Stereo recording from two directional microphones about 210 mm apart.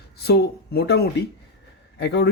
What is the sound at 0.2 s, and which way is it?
Speech, 50° left (ahead or behind).